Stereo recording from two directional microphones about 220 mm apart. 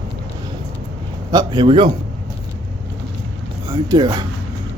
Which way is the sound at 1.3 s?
20° right (ahead or behind).